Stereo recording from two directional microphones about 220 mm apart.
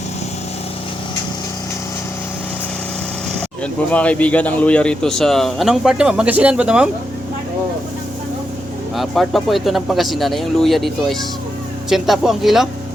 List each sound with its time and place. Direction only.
3.9 s a man's voice: 5° left (ahead or behind)
9.0 s a man's voice: centre (ahead or behind)